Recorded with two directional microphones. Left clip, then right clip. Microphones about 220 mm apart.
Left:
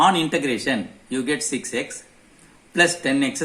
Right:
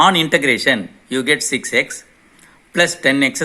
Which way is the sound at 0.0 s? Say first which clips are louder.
Right 5 dB; 45° right (ahead or behind).